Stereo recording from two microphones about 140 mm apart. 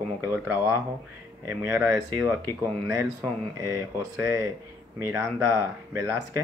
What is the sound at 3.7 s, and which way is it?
Speech, 20° right (ahead or behind).